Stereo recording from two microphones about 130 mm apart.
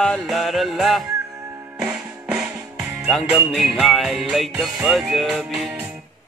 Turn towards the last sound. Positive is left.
turn(degrees=0)  # may be behind; listen again after turning